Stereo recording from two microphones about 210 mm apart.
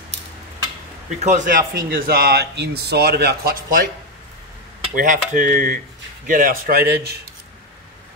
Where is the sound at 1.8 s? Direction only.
45° right (ahead or behind).